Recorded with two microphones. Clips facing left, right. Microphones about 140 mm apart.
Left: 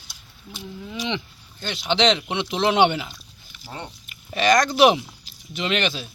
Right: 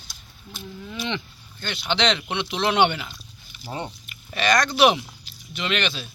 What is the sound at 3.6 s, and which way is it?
Speech, 10° right (ahead or behind).